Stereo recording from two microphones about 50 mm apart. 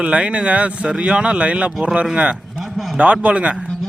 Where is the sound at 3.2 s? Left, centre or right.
Right.